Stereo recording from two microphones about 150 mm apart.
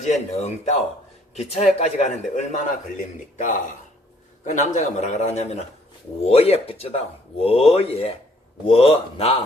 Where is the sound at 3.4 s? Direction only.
60° left (ahead or behind); by 9.4 s 40° left (ahead or behind).